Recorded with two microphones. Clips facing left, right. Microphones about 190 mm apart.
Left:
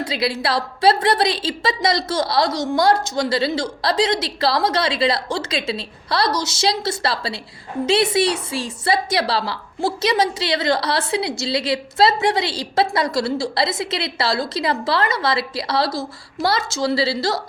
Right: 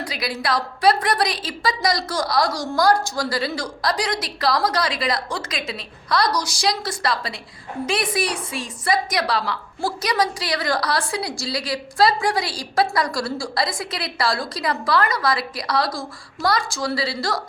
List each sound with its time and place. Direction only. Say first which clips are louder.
0.0 s a woman's voice: left 5 dB; 25° left (ahead or behind)